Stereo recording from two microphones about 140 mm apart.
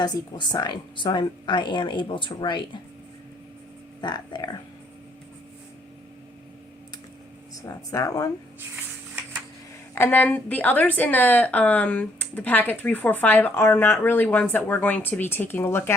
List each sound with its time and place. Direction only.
0.0 s speech: 30° left (ahead or behind)
4.0 s speech: 30° left (ahead or behind)
7.5 s speech: 25° left (ahead or behind)
8.7 s a sound: 15° right (ahead or behind)
9.9 s a woman's voice: 15° left (ahead or behind)